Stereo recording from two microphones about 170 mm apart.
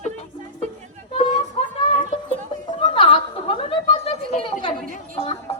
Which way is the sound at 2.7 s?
30° left (ahead or behind).